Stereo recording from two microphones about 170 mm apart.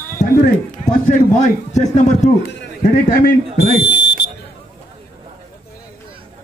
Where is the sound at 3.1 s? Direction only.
65° left (ahead or behind); by 4.1 s 90° left.